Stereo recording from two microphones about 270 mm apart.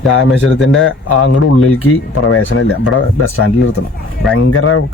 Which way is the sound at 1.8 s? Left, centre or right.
Left.